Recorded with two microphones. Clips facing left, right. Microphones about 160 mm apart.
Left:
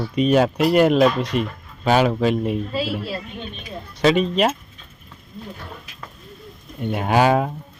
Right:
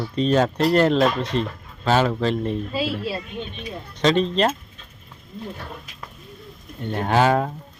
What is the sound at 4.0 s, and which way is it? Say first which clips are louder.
Speech: left 2 dB; 10° left (ahead or behind).